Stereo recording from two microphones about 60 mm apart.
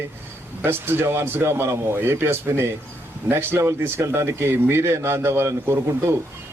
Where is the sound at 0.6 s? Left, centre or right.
Right.